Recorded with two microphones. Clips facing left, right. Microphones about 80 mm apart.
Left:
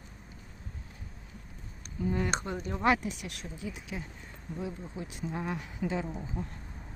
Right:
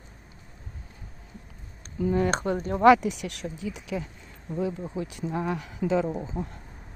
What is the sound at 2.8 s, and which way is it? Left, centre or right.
Speech, right.